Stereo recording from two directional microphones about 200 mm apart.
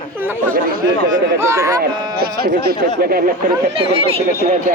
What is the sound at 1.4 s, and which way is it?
Speech, 15° right (ahead or behind).